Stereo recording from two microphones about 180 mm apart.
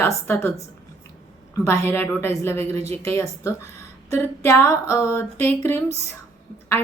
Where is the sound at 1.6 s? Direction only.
15° left (ahead or behind).